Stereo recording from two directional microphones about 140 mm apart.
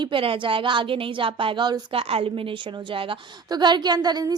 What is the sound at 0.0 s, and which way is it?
A woman's voice, 40° right (ahead or behind).